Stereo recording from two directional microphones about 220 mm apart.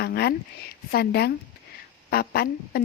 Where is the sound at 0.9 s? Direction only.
45° left (ahead or behind).